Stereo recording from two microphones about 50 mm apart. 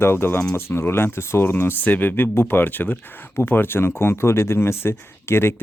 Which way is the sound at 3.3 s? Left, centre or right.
Left.